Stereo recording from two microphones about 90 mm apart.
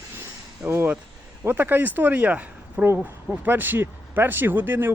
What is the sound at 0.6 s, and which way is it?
Speech, 20° right (ahead or behind).